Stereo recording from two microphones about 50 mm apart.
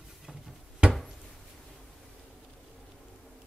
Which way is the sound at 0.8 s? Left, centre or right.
Centre.